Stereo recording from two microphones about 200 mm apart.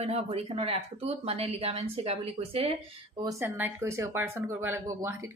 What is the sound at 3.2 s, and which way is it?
Speech, 10° right (ahead or behind).